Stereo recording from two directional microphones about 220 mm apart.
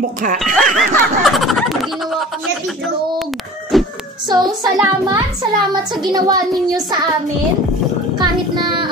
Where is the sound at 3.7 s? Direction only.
Centre (ahead or behind).